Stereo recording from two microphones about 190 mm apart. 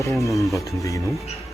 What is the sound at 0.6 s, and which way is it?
Speech, 15° left (ahead or behind).